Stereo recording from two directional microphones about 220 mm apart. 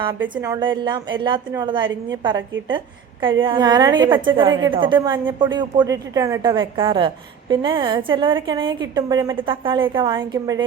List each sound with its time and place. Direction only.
0.4 s speech: 20° right (ahead or behind)